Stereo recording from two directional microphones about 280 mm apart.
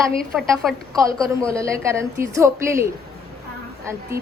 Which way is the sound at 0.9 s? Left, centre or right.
Centre.